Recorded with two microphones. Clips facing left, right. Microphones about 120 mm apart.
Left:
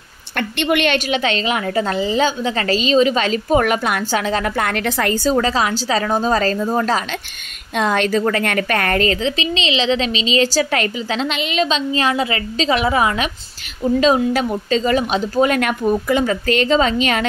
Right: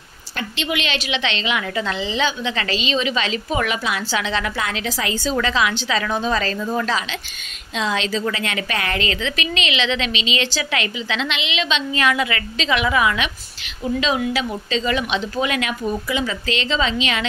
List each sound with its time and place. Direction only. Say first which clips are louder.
0.4 s a woman's voice: left 7 dB; 55° left (ahead or behind)
5.1 s a woman's voice: left 3 dB; 40° left (ahead or behind)